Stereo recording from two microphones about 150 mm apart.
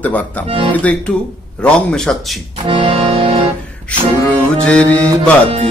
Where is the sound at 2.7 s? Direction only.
35° right (ahead or behind).